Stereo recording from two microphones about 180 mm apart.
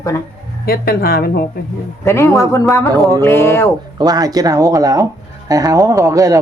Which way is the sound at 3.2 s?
15° left (ahead or behind).